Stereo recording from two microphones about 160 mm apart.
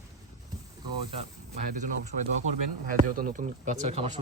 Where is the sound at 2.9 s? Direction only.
60° right (ahead or behind).